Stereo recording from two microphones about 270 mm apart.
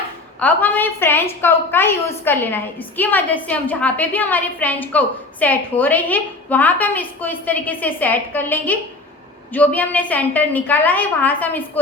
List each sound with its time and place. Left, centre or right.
0.3 s a woman's voice: centre